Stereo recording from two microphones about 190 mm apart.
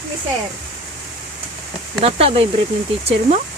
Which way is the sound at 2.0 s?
30° right (ahead or behind).